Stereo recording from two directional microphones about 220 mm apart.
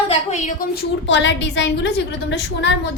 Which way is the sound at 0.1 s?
30° left (ahead or behind).